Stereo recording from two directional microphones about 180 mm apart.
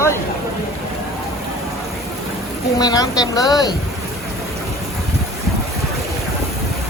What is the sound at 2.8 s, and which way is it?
Speech, 20° left (ahead or behind).